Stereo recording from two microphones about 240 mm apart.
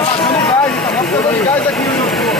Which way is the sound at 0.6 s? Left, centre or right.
Centre.